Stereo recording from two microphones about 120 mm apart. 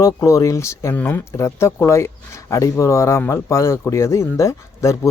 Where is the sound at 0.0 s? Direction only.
25° left (ahead or behind).